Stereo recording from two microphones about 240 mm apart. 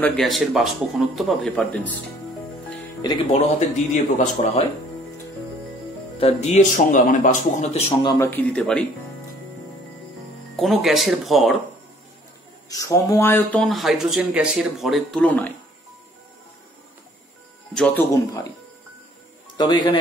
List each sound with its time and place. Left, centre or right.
0.0 s speech: centre
3.0 s speech: centre
3.5 s speech: left
6.1 s speech: left; by 8.8 s centre
10.5 s speech: centre
12.6 s speech: centre
17.7 s speech: centre
19.5 s speech: centre